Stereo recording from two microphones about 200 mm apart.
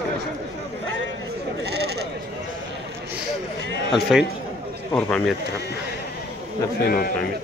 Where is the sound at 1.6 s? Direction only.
55° right (ahead or behind).